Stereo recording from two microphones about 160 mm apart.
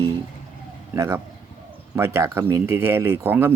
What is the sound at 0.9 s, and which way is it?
A man's voice, 20° right (ahead or behind).